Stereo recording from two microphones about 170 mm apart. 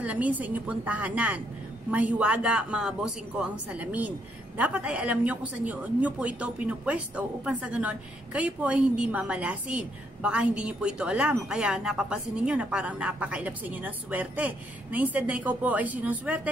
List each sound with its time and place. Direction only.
0.0 s a woman's voice: 10° right (ahead or behind)